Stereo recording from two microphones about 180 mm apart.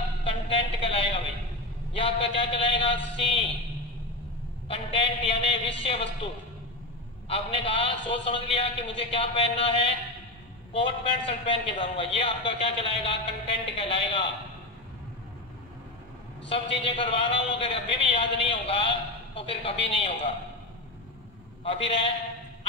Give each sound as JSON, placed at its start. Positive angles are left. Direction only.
{"t": 0.2, "sound": "a sound", "side_deg": 30}
{"t": 1.9, "sound": "a man's voice", "side_deg": 30}
{"t": 4.6, "sound": "a man's voice", "side_deg": 30}
{"t": 16.4, "sound": "a man's voice", "side_deg": 30}
{"t": 21.6, "sound": "a man's voice", "side_deg": 30}